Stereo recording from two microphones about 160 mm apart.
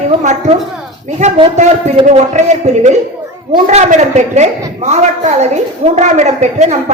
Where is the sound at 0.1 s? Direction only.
45° right (ahead or behind).